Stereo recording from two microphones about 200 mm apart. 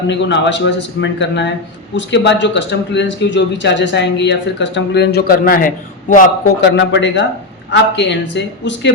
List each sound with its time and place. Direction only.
0.1 s speech: 60° left (ahead or behind); by 6.2 s 40° left (ahead or behind)
6.6 s speech: 65° left (ahead or behind)